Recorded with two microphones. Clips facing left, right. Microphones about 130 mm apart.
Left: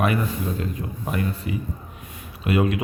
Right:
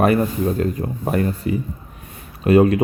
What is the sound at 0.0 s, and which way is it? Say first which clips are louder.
Speech: right 7 dB; 40° right (ahead or behind).